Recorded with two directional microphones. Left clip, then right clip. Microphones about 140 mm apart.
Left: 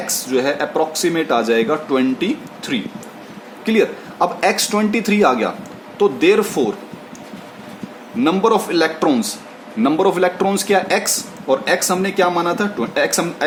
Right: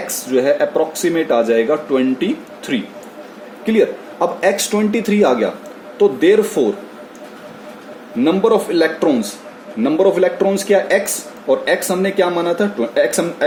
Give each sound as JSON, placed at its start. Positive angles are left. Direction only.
{"t": 0.3, "sound": "speech", "side_deg": 40}
{"t": 8.2, "sound": "speech", "side_deg": 40}